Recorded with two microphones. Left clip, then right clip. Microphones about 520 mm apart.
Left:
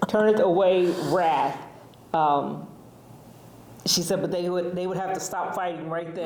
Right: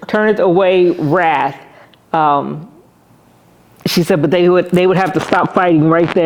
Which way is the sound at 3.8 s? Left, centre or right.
Right.